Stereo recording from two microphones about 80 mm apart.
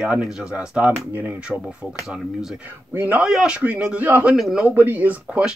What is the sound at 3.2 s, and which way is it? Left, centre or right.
Speech, centre.